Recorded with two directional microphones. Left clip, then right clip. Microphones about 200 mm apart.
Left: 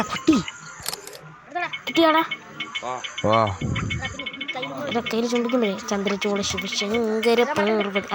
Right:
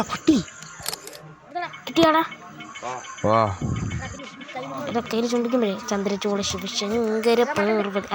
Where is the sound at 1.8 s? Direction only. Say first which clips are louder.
Even; centre (ahead or behind).